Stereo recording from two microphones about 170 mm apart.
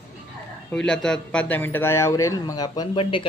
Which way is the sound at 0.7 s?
5° left (ahead or behind).